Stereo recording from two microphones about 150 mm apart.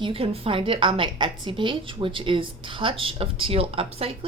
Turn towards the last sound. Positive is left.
turn(degrees=-40)  # may be behind; listen again after turning